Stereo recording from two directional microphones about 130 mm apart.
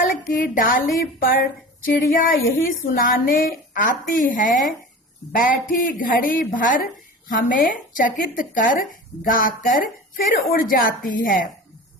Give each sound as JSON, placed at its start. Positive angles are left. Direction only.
{"t": 0.0, "sound": "speech", "side_deg": 90}